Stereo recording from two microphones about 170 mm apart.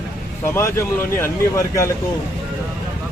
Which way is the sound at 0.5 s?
15° left (ahead or behind).